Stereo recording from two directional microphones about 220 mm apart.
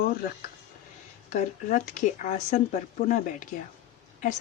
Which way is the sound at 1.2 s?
35° left (ahead or behind).